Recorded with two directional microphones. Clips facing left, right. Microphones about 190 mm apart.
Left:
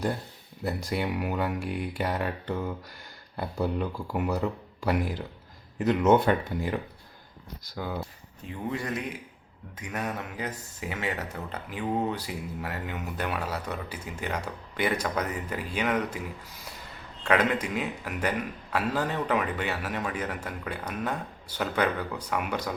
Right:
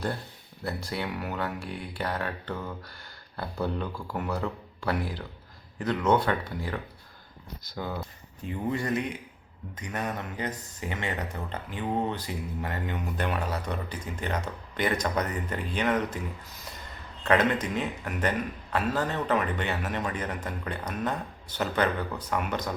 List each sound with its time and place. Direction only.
0.6 s a man's voice: 15° left (ahead or behind)
7.6 s a man's voice: 10° left (ahead or behind)
17.2 s a man's voice: 10° left (ahead or behind)